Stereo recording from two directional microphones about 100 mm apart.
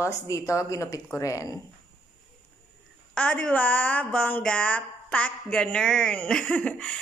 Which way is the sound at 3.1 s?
10° left (ahead or behind).